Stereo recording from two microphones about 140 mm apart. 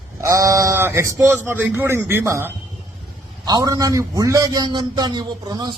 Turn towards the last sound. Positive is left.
turn(degrees=-30)  # may be behind; listen again after turning